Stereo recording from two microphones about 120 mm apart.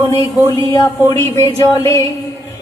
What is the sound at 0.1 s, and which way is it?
Speech, 25° left (ahead or behind).